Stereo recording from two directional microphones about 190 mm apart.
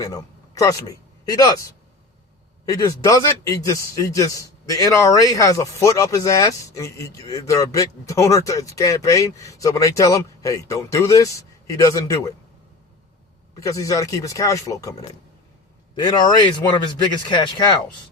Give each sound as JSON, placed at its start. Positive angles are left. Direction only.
{"t": 0.0, "sound": "a man's voice", "side_deg": 20}
{"t": 13.6, "sound": "a man's voice", "side_deg": 15}
{"t": 16.0, "sound": "speech", "side_deg": 25}